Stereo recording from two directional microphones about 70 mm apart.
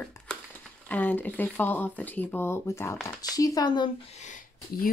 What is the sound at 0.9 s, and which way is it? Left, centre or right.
Speech, left.